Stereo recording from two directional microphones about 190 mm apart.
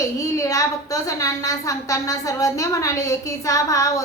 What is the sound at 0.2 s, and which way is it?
A woman's voice, 15° left (ahead or behind).